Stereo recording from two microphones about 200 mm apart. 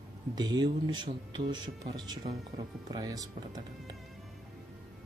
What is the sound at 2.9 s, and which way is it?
Speech, 20° right (ahead or behind).